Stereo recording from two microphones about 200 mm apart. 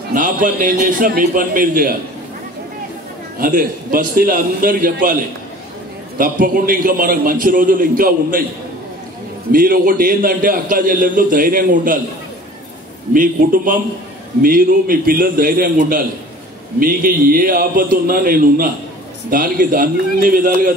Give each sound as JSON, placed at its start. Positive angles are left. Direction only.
{"t": 0.1, "sound": "a man's voice", "side_deg": -40}
{"t": 3.3, "sound": "a man's voice", "side_deg": -45}
{"t": 9.5, "sound": "a man's voice", "side_deg": -45}
{"t": 13.1, "sound": "a man's voice", "side_deg": -45}